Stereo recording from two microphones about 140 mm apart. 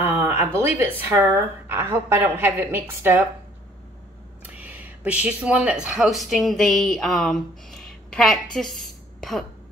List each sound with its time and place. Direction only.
0.0 s speech: 15° right (ahead or behind)
4.4 s a woman's voice: 10° right (ahead or behind); by 8.4 s 5° left (ahead or behind)
8.5 s a sound: centre (ahead or behind)